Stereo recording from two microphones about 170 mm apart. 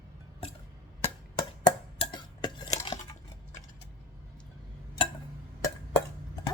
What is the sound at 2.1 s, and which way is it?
Dishes, 25° left (ahead or behind).